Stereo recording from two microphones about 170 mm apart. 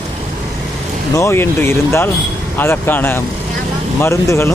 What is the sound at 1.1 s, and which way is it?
Speech, 15° left (ahead or behind).